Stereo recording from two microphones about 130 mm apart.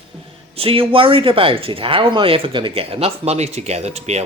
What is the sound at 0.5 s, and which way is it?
Speech, 45° right (ahead or behind).